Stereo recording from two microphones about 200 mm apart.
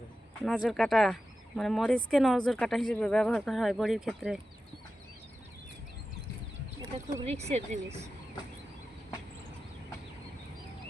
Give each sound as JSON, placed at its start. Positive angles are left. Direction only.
{"t": 0.4, "sound": "speech", "side_deg": 0}
{"t": 6.9, "sound": "speech", "side_deg": -30}